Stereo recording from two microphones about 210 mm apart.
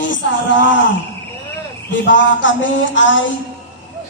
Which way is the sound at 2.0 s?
60° left (ahead or behind).